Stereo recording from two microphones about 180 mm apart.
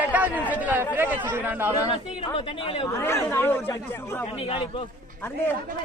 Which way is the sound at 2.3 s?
30° left (ahead or behind).